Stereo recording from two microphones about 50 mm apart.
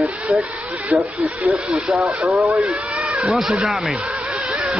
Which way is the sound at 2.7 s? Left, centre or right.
Right.